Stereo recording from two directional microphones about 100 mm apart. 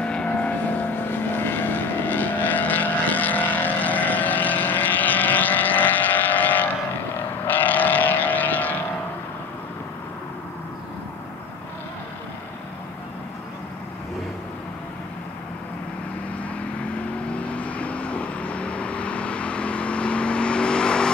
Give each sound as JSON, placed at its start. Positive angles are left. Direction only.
{"t": 0.0, "sound": "vehicle", "side_deg": 10}
{"t": 17.3, "sound": "vehicle", "side_deg": 15}